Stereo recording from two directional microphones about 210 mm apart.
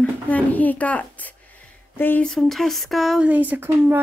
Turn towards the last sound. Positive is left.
turn(degrees=-10)  # may be behind; listen again after turning